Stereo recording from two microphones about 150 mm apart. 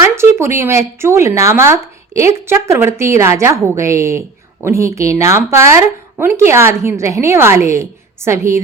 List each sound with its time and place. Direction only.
0.0 s speech: 20° right (ahead or behind)